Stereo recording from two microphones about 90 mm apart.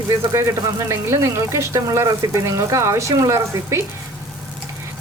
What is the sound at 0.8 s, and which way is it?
A woman's voice, 30° right (ahead or behind).